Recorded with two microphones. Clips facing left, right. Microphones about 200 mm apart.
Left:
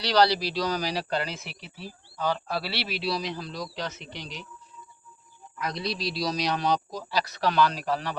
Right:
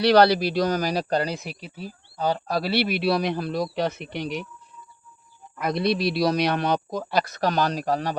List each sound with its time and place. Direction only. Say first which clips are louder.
0.0 s a man's voice: right 6 dB; 55° right (ahead or behind)
5.5 s a man's voice: right 8 dB; 60° right (ahead or behind); by 8.2 s 40° right (ahead or behind)